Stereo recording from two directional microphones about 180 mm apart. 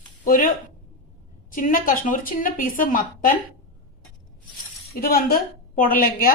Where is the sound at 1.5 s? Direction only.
50° left (ahead or behind).